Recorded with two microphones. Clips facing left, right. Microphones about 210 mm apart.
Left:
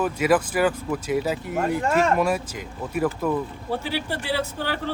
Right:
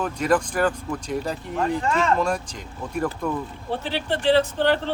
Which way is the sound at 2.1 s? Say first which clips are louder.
Left 2 dB; 5° left (ahead or behind).